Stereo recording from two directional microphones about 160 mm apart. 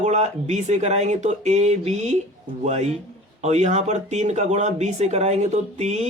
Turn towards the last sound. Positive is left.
turn(degrees=-45)  # may be behind; listen again after turning